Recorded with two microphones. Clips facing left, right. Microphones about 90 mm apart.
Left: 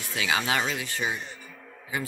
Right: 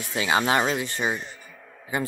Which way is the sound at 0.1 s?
30° right (ahead or behind).